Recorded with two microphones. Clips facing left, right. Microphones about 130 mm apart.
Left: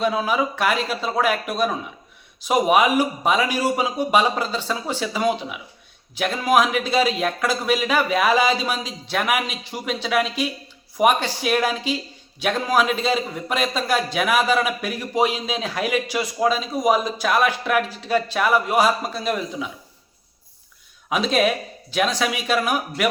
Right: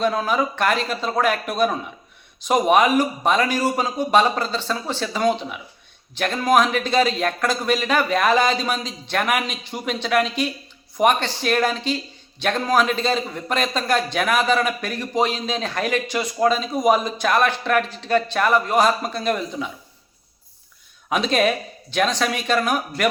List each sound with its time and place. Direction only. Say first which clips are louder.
0.0 s a man's voice: even; 5° left (ahead or behind)
21.1 s a man's voice: even; centre (ahead or behind)